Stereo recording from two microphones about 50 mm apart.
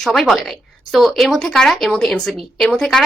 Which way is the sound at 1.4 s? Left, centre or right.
Centre.